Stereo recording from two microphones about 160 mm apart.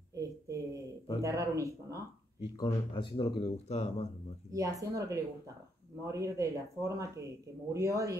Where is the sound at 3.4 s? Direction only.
40° left (ahead or behind).